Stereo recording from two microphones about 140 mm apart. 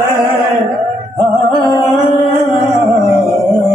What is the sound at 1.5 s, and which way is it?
Music, 25° right (ahead or behind).